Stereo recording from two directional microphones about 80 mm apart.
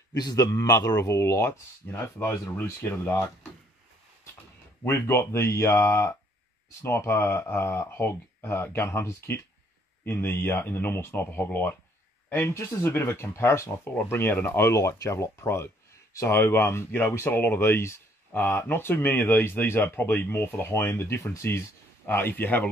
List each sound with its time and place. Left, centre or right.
0.1 s a man's voice: left
0.5 s speech: left
4.8 s speech: left
21.2 s speech: left
21.5 s speech: left